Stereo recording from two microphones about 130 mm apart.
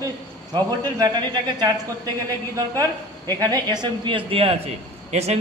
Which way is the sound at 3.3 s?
30° right (ahead or behind).